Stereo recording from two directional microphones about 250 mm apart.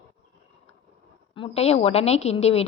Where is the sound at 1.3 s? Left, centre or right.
Left.